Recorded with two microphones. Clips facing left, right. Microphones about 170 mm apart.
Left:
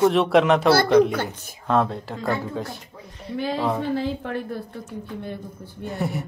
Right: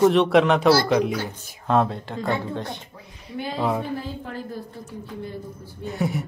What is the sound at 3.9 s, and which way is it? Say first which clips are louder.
Speech: left 5 dB; 90° left.